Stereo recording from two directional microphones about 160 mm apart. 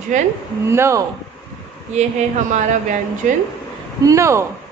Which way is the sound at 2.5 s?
50° right (ahead or behind).